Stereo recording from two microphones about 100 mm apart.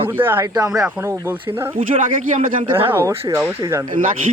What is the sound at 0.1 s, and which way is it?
Speech, 20° right (ahead or behind).